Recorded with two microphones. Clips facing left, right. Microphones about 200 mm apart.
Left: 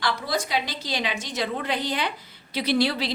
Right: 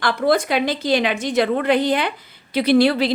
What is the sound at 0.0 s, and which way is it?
A woman's voice, 55° right (ahead or behind).